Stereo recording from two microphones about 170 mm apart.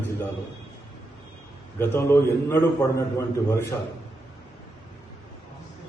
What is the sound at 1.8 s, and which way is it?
A man's voice, 15° left (ahead or behind).